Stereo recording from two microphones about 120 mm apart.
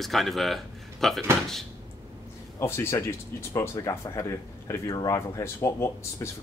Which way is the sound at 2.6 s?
20° left (ahead or behind).